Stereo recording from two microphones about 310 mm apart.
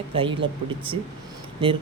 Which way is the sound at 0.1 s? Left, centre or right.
Centre.